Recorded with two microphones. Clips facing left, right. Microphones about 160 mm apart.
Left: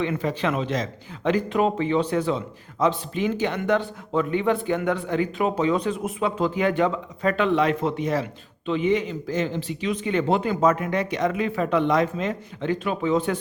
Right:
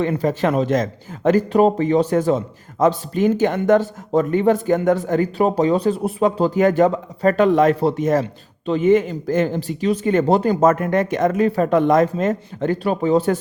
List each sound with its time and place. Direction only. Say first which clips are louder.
0.0 s speech: right 6 dB; 40° right (ahead or behind)